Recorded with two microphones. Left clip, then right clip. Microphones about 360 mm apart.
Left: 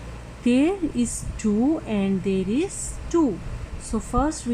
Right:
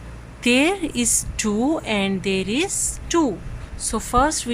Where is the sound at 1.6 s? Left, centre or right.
Right.